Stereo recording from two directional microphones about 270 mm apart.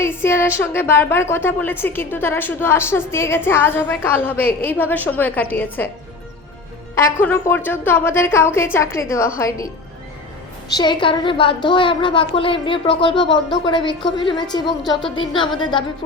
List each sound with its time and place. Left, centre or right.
0.0 s speech: centre
6.9 s speech: centre
10.8 s speech: centre